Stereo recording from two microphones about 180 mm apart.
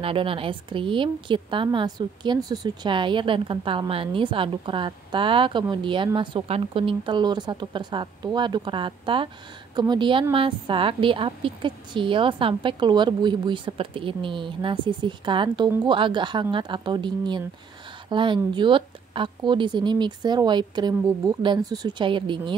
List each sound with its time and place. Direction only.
0.0 s a woman's voice: 30° right (ahead or behind)